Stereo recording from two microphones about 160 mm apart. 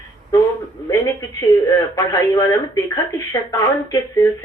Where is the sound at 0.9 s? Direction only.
20° left (ahead or behind).